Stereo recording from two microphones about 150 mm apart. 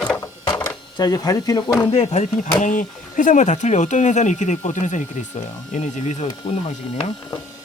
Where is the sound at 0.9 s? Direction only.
25° left (ahead or behind).